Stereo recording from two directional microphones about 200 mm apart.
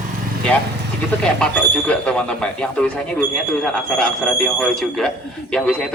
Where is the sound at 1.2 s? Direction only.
5° left (ahead or behind).